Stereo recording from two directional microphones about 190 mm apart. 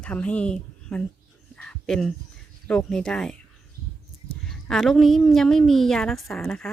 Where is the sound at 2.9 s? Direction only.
5° left (ahead or behind).